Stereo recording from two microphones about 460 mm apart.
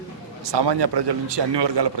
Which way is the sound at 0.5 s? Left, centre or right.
Right.